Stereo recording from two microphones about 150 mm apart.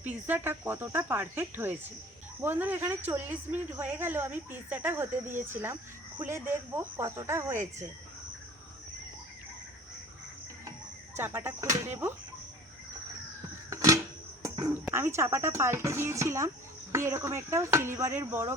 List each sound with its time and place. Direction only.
0.0 s speech: 10° right (ahead or behind)
11.3 s speech: 15° right (ahead or behind)
13.7 s music: 20° right (ahead or behind)
14.4 s speech: 20° right (ahead or behind)